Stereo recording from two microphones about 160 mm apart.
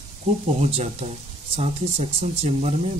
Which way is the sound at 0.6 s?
40° right (ahead or behind).